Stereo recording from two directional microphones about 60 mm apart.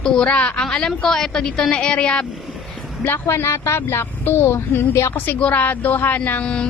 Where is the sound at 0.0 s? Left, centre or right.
Centre.